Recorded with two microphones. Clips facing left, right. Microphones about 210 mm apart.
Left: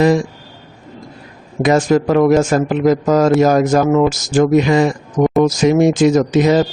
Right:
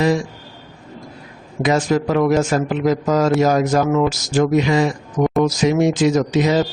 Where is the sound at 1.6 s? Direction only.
45° left (ahead or behind).